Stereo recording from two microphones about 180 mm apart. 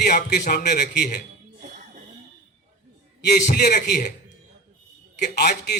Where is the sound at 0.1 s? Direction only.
60° left (ahead or behind).